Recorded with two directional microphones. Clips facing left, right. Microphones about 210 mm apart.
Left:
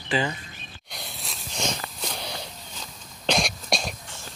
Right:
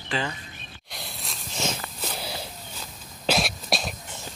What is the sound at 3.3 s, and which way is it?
Cough, 5° right (ahead or behind).